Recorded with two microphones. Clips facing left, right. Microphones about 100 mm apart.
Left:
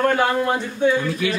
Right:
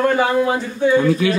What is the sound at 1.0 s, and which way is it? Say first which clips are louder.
Speech: right 7 dB; 40° right (ahead or behind).